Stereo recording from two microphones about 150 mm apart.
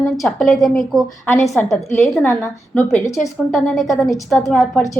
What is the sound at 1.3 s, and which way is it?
Speech, 20° left (ahead or behind).